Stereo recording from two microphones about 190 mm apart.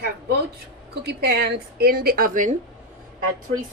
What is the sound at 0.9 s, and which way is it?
A woman's voice, 60° right (ahead or behind).